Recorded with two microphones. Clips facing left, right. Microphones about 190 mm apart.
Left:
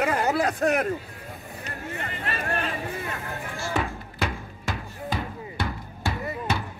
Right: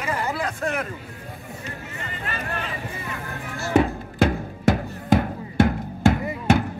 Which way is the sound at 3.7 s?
40° right (ahead or behind).